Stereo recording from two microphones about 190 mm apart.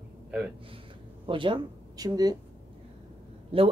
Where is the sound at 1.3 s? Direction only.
25° right (ahead or behind).